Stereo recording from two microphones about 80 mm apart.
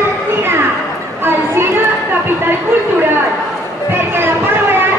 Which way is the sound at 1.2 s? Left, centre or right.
Right.